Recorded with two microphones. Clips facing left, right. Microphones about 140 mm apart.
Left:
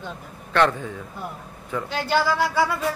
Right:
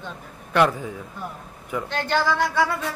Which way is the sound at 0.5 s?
10° right (ahead or behind).